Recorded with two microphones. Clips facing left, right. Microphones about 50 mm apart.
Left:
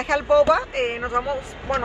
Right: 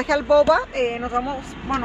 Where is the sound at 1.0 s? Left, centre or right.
Left.